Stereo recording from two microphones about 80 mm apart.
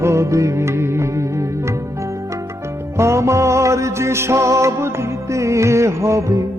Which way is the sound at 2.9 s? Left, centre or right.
Right.